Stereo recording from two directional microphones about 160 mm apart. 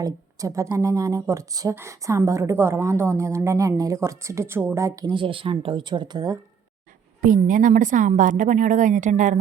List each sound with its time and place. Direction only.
0.0 s a woman's voice: 20° right (ahead or behind)
5.1 s speech: 35° right (ahead or behind)
7.2 s a woman's voice: 55° right (ahead or behind)